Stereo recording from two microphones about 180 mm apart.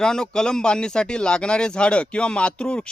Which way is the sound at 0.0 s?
5° left (ahead or behind).